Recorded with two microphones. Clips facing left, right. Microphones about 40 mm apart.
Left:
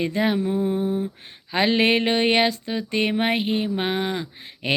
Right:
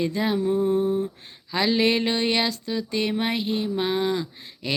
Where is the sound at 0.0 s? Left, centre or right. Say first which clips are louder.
Left 2 dB; left.